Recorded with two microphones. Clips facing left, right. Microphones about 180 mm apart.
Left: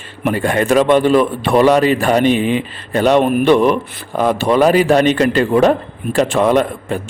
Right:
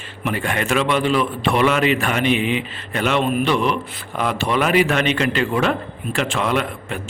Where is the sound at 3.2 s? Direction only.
55° left (ahead or behind).